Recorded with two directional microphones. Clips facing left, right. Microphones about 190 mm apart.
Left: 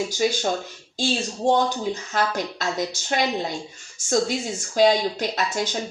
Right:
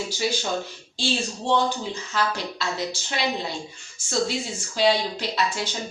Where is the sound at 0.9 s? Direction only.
45° left (ahead or behind).